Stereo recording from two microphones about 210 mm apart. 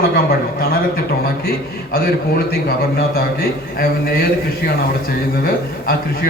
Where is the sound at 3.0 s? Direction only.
45° left (ahead or behind).